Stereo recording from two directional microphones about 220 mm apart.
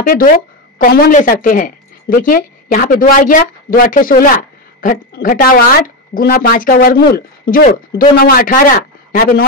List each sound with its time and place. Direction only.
0.0 s a woman's voice: 40° left (ahead or behind)